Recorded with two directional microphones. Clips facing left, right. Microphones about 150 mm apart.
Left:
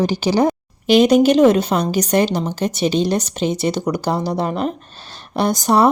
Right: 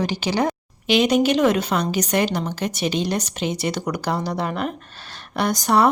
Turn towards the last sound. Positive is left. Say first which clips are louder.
# left 3 dB
turn(degrees=30)  # may be behind; listen again after turning